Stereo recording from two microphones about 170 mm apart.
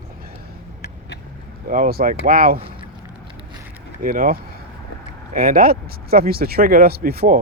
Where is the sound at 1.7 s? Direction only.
55° right (ahead or behind).